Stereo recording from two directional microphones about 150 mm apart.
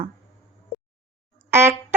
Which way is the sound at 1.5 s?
15° right (ahead or behind).